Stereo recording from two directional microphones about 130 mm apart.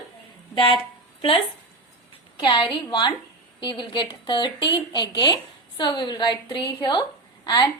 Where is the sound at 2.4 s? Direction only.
40° left (ahead or behind).